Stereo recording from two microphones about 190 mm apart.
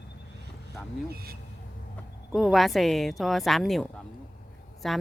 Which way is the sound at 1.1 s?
55° right (ahead or behind).